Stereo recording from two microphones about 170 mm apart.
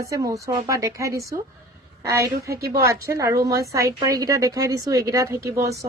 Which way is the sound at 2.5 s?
65° right (ahead or behind).